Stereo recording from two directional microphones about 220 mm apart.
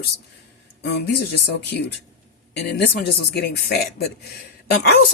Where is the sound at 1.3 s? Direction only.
45° left (ahead or behind).